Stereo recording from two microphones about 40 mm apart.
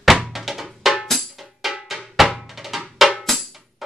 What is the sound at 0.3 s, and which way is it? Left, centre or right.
Drum, centre.